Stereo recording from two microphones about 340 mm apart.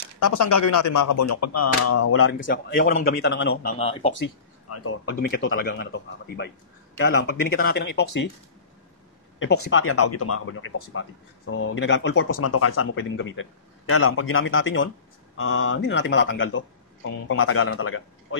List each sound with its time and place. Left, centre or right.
0.3 s speech: left
2.5 s a man's voice: left
4.1 s a man's voice: left
9.4 s speech: left